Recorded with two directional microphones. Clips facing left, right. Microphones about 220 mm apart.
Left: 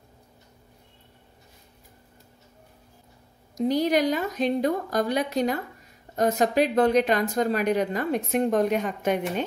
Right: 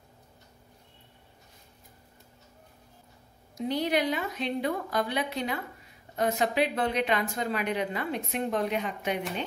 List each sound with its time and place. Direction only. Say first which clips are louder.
3.5 s a woman's voice: left 5 dB; 40° left (ahead or behind)